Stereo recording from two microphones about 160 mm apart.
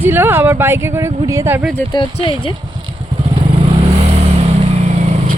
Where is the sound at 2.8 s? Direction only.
30° right (ahead or behind).